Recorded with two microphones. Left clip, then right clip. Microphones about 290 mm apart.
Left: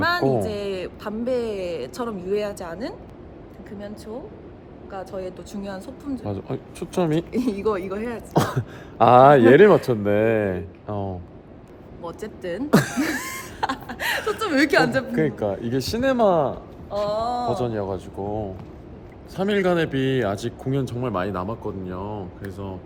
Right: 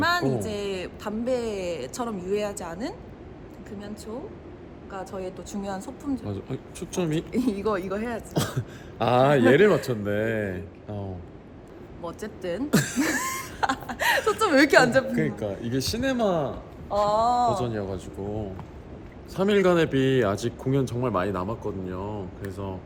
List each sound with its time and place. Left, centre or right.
0.0 s a woman's voice: centre
6.2 s speech: centre
7.3 s speech: centre
8.3 s speech: left
12.0 s speech: centre
12.7 s speech: left
13.0 s a sound: centre
14.3 s a woman's voice: centre
15.1 s speech: centre
16.9 s speech: centre
17.5 s speech: centre
19.4 s speech: centre